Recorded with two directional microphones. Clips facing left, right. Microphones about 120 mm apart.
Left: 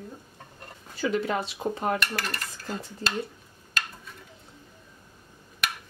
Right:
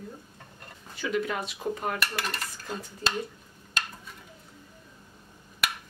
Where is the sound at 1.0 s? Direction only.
30° left (ahead or behind).